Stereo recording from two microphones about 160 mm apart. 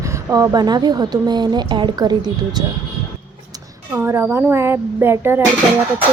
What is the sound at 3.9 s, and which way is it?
Speech, 15° right (ahead or behind).